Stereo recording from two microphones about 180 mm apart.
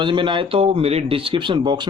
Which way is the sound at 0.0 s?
25° right (ahead or behind).